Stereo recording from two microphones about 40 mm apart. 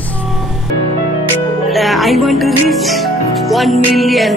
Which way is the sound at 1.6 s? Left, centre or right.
Centre.